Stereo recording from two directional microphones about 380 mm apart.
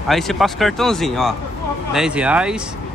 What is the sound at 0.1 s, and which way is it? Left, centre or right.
A man's voice, centre.